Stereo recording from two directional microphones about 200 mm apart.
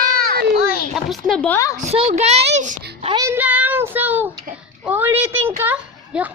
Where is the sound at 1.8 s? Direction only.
30° right (ahead or behind).